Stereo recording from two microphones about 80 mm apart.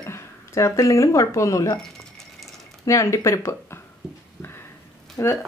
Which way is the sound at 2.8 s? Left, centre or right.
Left.